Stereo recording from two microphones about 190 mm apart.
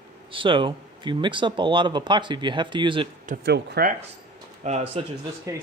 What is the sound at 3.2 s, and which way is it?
Speech, 55° right (ahead or behind).